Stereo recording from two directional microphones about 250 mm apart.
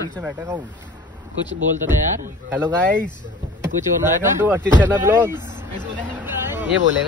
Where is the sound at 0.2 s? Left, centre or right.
Centre.